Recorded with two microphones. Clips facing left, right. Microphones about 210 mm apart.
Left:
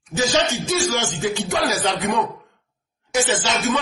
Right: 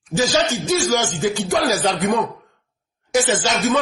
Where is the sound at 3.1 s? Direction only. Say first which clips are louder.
Right 3 dB; 35° right (ahead or behind).